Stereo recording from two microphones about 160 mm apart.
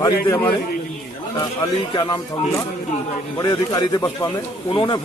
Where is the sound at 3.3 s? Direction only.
25° left (ahead or behind).